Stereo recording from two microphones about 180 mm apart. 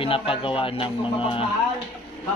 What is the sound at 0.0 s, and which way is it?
Speech, 30° left (ahead or behind).